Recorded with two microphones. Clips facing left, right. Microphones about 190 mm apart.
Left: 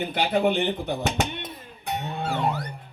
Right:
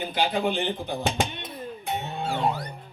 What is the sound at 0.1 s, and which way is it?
Speech, 60° left (ahead or behind).